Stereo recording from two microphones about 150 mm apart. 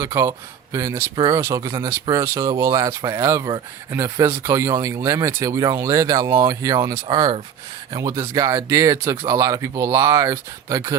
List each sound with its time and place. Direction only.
0.0 s speech: 20° right (ahead or behind)